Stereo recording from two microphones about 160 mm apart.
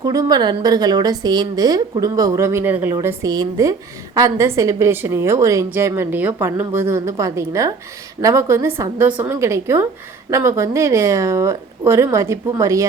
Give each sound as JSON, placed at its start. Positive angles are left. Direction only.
{"t": 0.0, "sound": "a woman's voice", "side_deg": -25}